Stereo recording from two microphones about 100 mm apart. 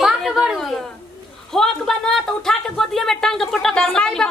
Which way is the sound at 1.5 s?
5° left (ahead or behind).